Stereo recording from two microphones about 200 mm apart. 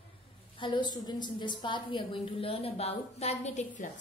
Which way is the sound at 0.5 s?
25° left (ahead or behind).